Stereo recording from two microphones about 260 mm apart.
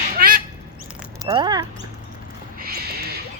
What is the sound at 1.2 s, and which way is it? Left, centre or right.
Speech, centre.